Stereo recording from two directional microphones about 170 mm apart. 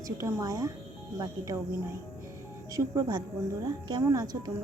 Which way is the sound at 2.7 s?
20° right (ahead or behind).